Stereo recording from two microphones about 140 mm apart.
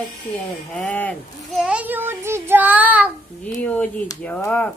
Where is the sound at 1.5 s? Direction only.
5° right (ahead or behind).